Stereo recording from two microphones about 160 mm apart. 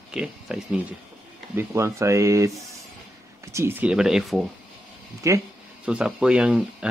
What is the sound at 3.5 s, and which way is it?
Speech, 15° right (ahead or behind).